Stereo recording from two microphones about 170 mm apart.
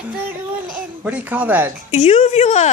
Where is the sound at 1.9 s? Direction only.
45° left (ahead or behind).